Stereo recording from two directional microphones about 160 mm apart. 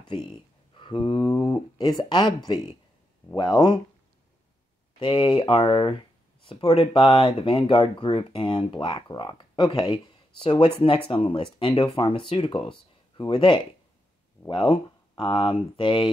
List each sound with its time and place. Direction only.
0.7 s speech: 30° left (ahead or behind)
5.0 s speech: 30° left (ahead or behind)